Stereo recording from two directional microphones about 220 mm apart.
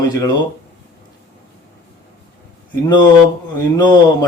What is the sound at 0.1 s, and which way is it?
Speech, 15° left (ahead or behind).